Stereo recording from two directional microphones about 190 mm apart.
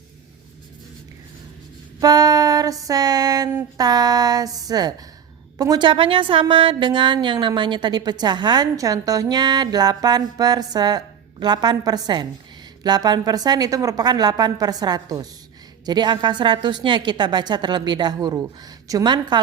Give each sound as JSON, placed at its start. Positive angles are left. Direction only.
{"t": 2.0, "sound": "female singing", "side_deg": -20}
{"t": 2.8, "sound": "a woman's voice", "side_deg": -20}